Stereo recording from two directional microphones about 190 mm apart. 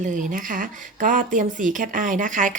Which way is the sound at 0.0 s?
40° right (ahead or behind).